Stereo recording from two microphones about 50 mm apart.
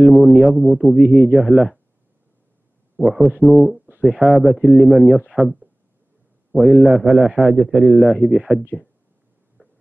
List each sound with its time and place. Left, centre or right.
0.0 s speech: centre
1.0 s a man's voice: centre
1.5 s speech: centre
3.0 s a man's voice: centre
7.9 s speech: centre
8.3 s a man's voice: centre
9.6 s a sound: left